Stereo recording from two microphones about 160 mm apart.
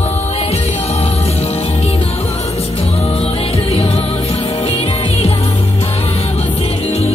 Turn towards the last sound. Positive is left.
turn(degrees=40)  # may be behind; listen again after turning